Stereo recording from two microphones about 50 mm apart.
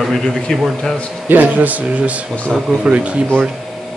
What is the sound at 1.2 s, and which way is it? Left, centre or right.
Speech, right.